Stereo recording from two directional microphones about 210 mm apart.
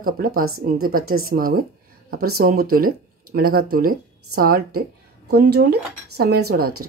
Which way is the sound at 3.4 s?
45° right (ahead or behind).